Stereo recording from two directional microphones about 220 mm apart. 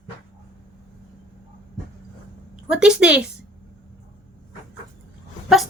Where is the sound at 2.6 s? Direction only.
5° right (ahead or behind).